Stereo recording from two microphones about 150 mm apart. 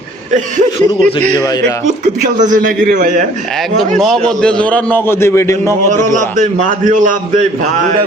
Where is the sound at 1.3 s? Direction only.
25° left (ahead or behind).